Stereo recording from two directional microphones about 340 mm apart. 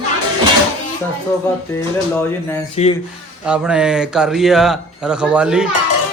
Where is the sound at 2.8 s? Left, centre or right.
Centre.